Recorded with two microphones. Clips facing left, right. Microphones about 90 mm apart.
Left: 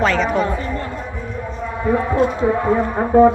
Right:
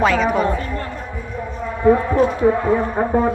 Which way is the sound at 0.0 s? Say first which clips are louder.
Right 1 dB; 5° right (ahead or behind).